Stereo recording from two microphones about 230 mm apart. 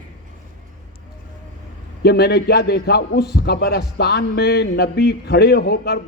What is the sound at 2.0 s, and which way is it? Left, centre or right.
A man's voice, left.